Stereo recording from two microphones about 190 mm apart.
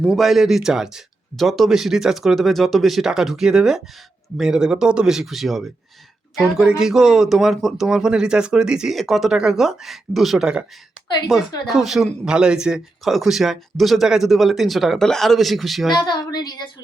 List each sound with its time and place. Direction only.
0.0 s speech: centre (ahead or behind)
15.9 s speech: 25° left (ahead or behind)